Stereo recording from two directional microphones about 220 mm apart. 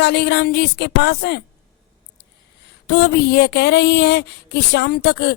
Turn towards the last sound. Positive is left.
turn(degrees=50)  # may be behind; listen again after turning